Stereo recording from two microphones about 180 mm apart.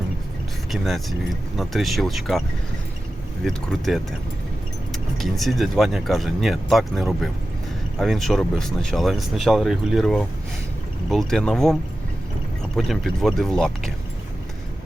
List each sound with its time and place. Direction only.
0.7 s speech: centre (ahead or behind)
3.4 s speech: centre (ahead or behind)